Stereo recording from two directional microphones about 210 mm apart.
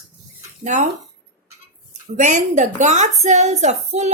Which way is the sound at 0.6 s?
35° right (ahead or behind).